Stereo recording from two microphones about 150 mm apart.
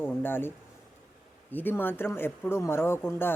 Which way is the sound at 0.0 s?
15° left (ahead or behind).